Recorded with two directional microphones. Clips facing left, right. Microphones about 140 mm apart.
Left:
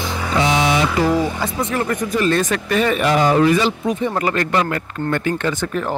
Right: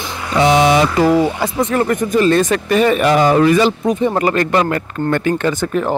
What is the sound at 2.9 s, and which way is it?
Speech, 55° right (ahead or behind).